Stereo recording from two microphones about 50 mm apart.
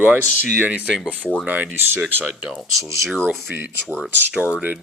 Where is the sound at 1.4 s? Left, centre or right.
Right.